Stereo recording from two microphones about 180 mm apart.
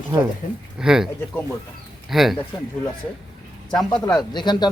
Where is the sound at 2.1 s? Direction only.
Centre (ahead or behind).